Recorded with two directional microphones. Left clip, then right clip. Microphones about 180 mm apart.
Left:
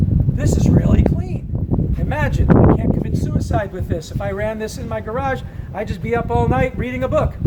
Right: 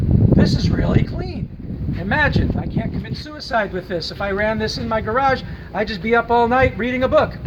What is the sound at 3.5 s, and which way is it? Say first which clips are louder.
Speech: right 4 dB; 10° left (ahead or behind).